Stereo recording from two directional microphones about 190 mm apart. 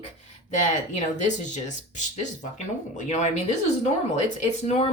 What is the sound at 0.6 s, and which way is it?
Speech, 40° left (ahead or behind).